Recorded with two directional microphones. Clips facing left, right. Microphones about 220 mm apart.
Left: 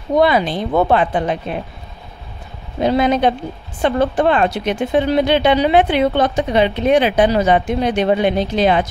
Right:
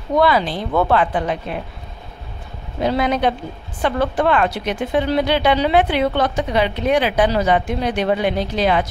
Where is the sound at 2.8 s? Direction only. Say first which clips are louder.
Left 3 dB; 20° left (ahead or behind).